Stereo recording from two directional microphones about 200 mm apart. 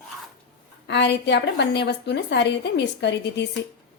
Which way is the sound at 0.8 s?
60° left (ahead or behind).